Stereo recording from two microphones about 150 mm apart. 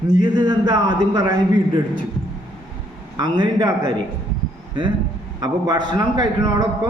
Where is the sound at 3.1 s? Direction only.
30° right (ahead or behind).